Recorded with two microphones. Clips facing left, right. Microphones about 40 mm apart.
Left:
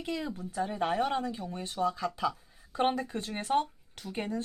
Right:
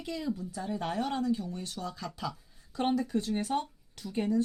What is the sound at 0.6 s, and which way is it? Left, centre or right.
A woman's voice, left.